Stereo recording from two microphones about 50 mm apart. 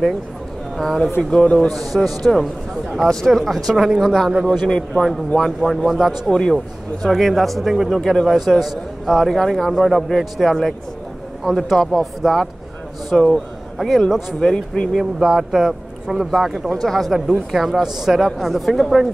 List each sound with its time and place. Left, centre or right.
0.7 s a man's voice: centre
1.3 s a man's voice: left
1.7 s a man's voice: centre
3.7 s speech: centre
4.0 s a man's voice: centre
8.0 s a man's voice: centre